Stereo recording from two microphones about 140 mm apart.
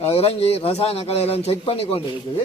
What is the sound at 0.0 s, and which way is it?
A man's voice, 45° left (ahead or behind).